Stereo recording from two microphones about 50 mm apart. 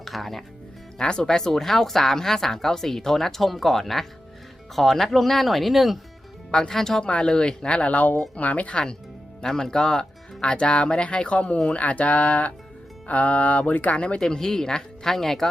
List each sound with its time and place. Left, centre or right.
0.0 s speech: centre
0.9 s speech: centre
6.5 s speech: centre
7.0 s speech: centre
14.2 s speech: centre